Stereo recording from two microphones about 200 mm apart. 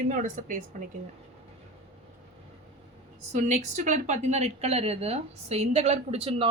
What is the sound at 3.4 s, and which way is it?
A woman's voice, 35° right (ahead or behind).